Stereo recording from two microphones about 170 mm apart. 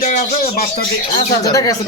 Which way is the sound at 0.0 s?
50° left (ahead or behind).